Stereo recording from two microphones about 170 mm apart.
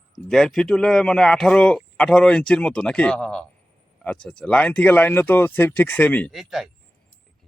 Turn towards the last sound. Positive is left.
turn(degrees=0)  # may be behind; listen again after turning